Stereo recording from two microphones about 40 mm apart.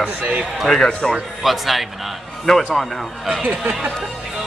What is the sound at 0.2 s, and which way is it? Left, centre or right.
Speech, right.